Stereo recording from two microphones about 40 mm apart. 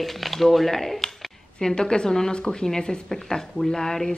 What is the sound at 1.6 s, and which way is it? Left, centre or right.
A woman's voice, left.